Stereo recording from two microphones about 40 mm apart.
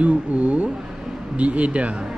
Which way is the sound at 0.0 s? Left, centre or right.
Right.